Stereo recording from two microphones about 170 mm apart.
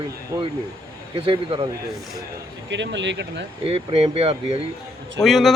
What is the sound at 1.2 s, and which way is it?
Speech, 35° right (ahead or behind).